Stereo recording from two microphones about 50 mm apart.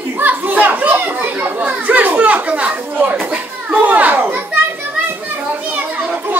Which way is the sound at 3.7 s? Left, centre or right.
Right.